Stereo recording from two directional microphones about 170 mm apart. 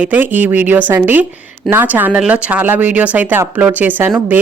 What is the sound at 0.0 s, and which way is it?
Speech, 10° right (ahead or behind).